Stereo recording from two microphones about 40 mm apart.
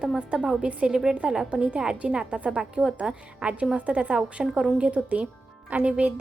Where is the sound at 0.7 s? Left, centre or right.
Right.